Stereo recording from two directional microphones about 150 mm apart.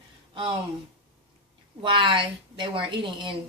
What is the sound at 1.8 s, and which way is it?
A woman's voice, 35° right (ahead or behind).